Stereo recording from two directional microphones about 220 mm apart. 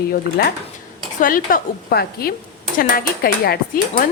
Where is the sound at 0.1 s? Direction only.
45° left (ahead or behind).